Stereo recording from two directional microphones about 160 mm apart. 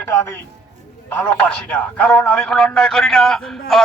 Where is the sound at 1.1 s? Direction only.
10° left (ahead or behind).